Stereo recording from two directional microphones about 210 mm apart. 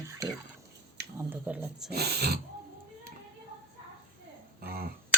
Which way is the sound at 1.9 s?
50° right (ahead or behind).